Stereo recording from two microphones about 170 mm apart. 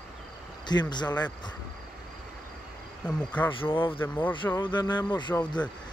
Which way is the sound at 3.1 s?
5° left (ahead or behind).